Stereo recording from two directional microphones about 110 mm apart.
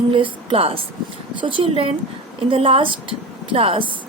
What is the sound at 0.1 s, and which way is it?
Speech, 55° right (ahead or behind).